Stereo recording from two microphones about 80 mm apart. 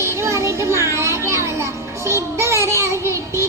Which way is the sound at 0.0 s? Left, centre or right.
Right.